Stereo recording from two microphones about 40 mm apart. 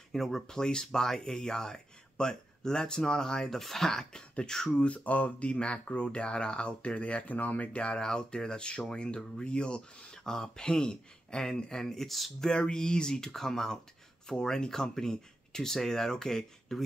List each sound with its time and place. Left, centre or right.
0.1 s speech: centre
0.5 s speech: centre
4.0 s speech: left
4.8 s speech: left
7.3 s speech: left
7.8 s speech: left; by 12.3 s centre
12.4 s speech: centre